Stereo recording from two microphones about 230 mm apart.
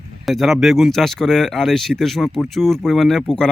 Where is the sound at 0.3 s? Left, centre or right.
Centre.